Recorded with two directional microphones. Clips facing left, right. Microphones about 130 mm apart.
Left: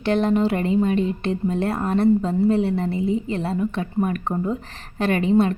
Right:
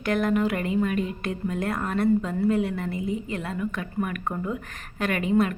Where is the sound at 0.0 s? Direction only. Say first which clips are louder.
Left 4 dB; 30° left (ahead or behind).